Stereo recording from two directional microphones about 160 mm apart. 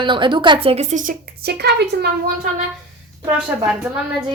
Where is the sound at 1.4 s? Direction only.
85° right.